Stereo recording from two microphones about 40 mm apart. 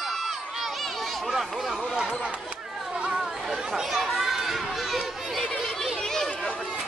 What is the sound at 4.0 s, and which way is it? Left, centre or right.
Speech, centre.